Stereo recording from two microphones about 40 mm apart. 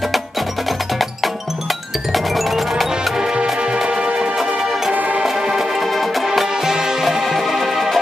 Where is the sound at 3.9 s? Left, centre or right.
Right.